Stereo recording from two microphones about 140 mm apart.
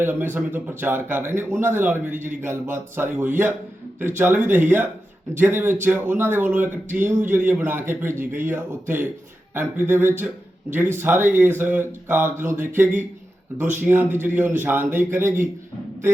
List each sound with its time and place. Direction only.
0.0 s speech: 15° right (ahead or behind)